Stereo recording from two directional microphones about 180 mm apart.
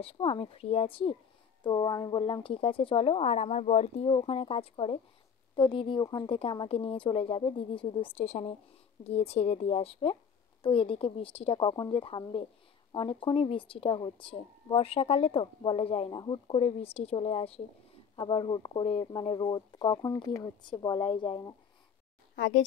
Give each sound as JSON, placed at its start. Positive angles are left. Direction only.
{"t": 0.0, "sound": "a woman's voice", "side_deg": 30}
{"t": 22.3, "sound": "speech", "side_deg": 90}